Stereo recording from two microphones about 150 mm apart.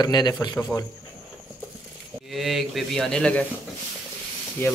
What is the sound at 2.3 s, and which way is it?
Speech, centre (ahead or behind).